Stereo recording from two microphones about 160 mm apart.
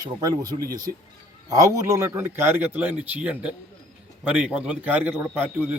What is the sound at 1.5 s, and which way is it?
A man's voice, 20° right (ahead or behind).